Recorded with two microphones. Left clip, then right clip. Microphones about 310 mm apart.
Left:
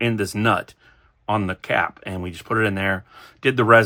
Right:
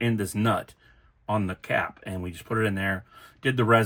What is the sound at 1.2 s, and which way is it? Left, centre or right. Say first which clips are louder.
Speech: left 6 dB; centre.